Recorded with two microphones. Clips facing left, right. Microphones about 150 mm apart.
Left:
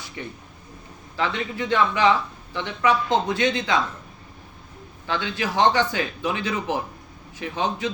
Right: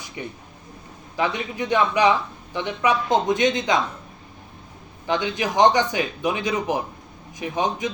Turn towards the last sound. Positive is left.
turn(degrees=-15)  # may be behind; listen again after turning